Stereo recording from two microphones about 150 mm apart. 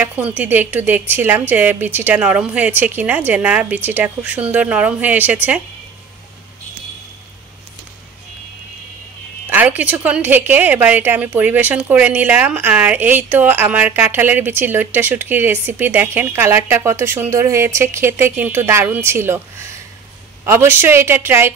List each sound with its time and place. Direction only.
0.0 s a woman's voice: 10° right (ahead or behind)
9.5 s a woman's voice: 10° right (ahead or behind)